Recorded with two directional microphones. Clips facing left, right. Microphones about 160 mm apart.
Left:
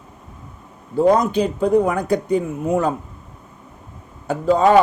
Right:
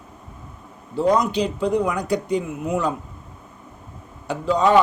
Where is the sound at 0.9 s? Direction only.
50° left (ahead or behind).